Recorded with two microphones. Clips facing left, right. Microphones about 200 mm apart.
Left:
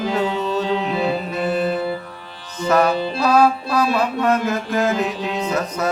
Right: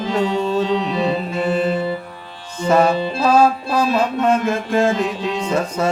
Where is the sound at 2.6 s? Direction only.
25° right (ahead or behind).